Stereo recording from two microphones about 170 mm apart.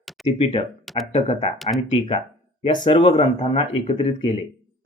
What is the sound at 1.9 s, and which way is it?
Speech, 35° left (ahead or behind).